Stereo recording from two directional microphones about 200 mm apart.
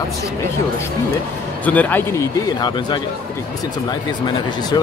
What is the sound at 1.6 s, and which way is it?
Speech, 5° left (ahead or behind).